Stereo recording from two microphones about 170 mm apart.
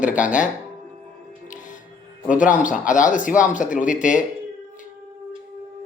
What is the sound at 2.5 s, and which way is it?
Speech, 50° left (ahead or behind).